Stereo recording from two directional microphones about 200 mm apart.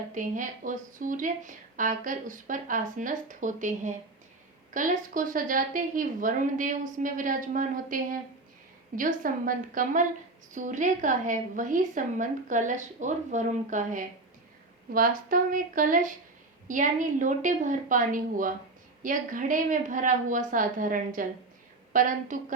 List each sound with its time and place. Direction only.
0.1 s speech: 40° right (ahead or behind)